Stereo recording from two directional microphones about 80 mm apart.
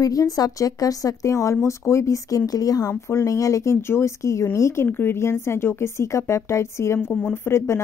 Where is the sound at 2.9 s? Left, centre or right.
Left.